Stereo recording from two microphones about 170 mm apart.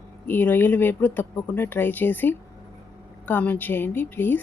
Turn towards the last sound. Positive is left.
turn(degrees=10)  # may be behind; listen again after turning